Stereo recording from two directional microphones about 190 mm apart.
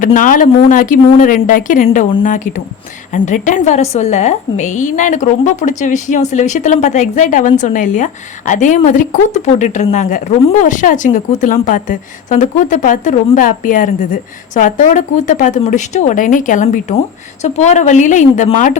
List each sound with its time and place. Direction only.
0.0 s a woman's voice: 45° left (ahead or behind)